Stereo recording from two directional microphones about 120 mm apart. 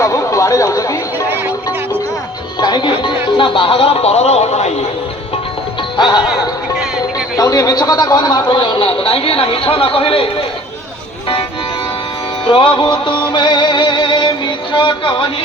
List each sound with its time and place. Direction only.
0.0 s chatter: 25° left (ahead or behind)
2.6 s speech: 40° left (ahead or behind); by 4.9 s 65° left (ahead or behind)
6.0 s music: 40° left (ahead or behind)
7.3 s a man's voice: 30° left (ahead or behind); by 10.2 s 50° left (ahead or behind)
12.5 s music: 45° left (ahead or behind)